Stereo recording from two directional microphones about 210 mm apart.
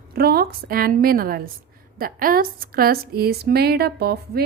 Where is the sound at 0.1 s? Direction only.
45° right (ahead or behind).